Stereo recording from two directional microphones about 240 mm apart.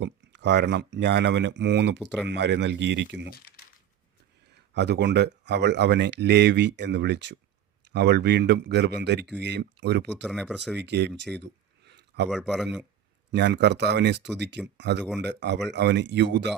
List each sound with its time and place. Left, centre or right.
0.0 s speech: right
4.7 s speech: right
10.1 s speech: centre
10.8 s speech: right
11.9 s a sound: right
12.3 s speech: centre
13.3 s speech: right